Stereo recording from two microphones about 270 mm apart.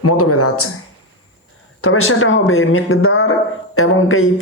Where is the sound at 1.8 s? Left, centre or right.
Left.